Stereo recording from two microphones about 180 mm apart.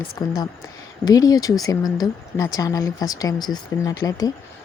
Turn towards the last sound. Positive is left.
turn(degrees=20)  # may be behind; listen again after turning